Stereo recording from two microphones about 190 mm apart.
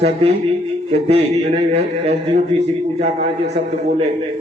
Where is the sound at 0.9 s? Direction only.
30° right (ahead or behind).